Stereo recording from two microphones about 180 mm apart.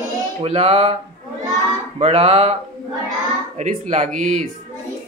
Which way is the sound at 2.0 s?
35° right (ahead or behind).